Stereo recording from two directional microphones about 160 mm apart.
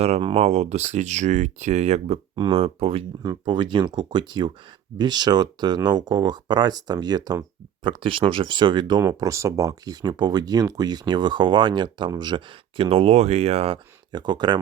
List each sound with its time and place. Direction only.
0.0 s speech: 35° right (ahead or behind)
14.1 s speech: 25° right (ahead or behind)